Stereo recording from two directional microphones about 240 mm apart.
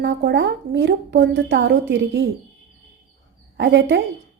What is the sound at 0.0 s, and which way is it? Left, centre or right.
A woman's voice, right.